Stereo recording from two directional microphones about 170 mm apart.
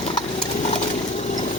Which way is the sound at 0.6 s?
45° left (ahead or behind).